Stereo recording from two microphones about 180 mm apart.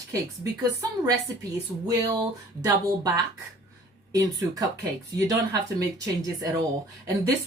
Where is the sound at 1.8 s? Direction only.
20° right (ahead or behind).